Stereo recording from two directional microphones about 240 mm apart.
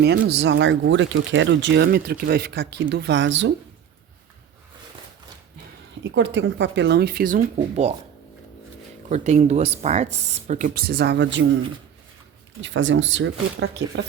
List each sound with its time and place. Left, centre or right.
0.0 s speech: right
6.0 s speech: right
9.0 s speech: right
12.6 s speech: right